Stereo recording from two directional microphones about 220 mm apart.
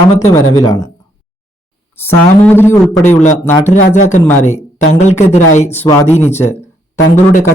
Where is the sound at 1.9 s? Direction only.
10° left (ahead or behind).